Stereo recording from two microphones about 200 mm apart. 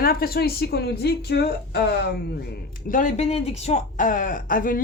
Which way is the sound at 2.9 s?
40° left (ahead or behind).